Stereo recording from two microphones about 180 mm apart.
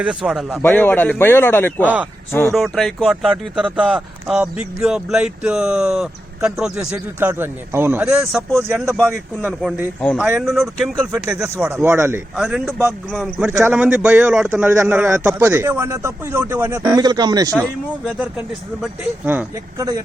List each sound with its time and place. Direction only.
0.0 s speech: 5° right (ahead or behind)
0.6 s a man's voice: 10° left (ahead or behind)
2.5 s speech: centre (ahead or behind)
9.5 s speech: centre (ahead or behind)
11.4 s a man's voice: 15° right (ahead or behind)
12.4 s speech: centre (ahead or behind)
13.4 s a man's voice: 10° right (ahead or behind)
17.5 s speech: 5° left (ahead or behind)
18.2 s a man's voice: 5° right (ahead or behind)